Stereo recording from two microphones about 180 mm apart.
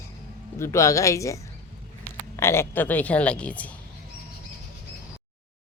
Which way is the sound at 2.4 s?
15° left (ahead or behind).